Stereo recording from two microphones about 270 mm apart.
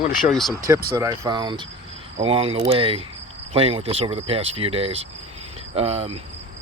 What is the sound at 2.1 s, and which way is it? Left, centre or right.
Cricket, right.